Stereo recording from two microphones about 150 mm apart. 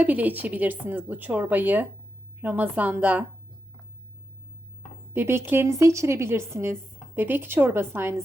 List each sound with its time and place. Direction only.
0.0 s a woman's voice: 10° right (ahead or behind)
5.1 s a woman's voice: 15° right (ahead or behind)